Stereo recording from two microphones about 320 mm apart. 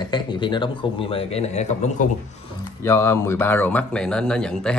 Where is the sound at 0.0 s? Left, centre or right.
Centre.